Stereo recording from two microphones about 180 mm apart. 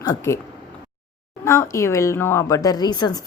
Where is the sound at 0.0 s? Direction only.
20° left (ahead or behind).